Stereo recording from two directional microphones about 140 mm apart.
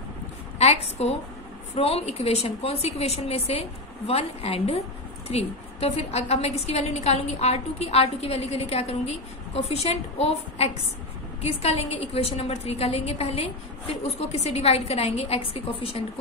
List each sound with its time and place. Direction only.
0.6 s a woman's voice: 50° left (ahead or behind)